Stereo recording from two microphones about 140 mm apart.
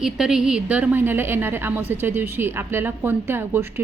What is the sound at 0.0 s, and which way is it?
A woman's voice, 5° right (ahead or behind).